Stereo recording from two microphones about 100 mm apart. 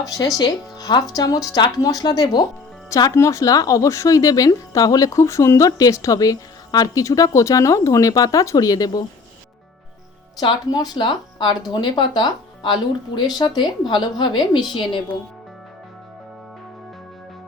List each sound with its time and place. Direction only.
0.0 s speech: 35° left (ahead or behind)
10.4 s speech: 45° left (ahead or behind)